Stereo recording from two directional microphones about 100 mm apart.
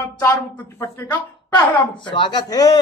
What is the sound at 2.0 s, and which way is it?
Speech, 55° left (ahead or behind).